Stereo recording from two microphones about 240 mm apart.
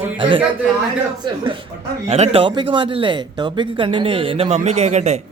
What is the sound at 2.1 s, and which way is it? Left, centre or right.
Speech, right.